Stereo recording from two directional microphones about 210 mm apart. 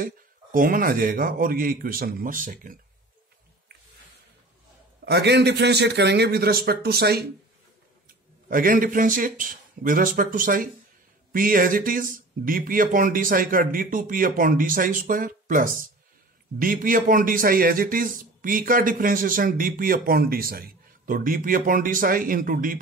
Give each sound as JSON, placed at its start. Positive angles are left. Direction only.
{"t": 0.0, "sound": "a man's voice", "side_deg": -40}
{"t": 5.0, "sound": "a man's voice", "side_deg": -55}
{"t": 8.5, "sound": "a man's voice", "side_deg": -40}